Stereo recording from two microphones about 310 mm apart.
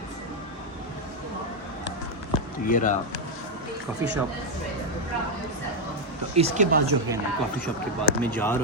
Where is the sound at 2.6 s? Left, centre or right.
Left.